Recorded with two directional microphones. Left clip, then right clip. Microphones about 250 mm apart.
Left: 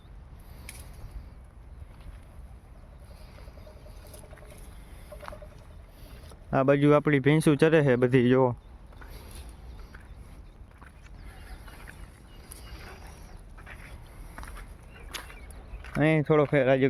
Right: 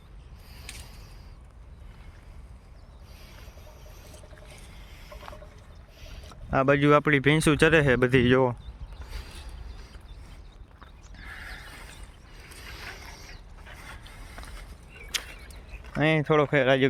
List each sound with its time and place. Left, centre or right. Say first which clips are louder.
0.7 s a sound: right 4 dB; left
6.0 s speech: right 4 dB; centre
11.2 s mechanisms: right 12 dB; centre
12.8 s mechanisms: right 7 dB; centre
14.0 s vehicle: right 1 dB; centre
15.1 s whip: right 8 dB; centre
15.8 s speech: right 1 dB; centre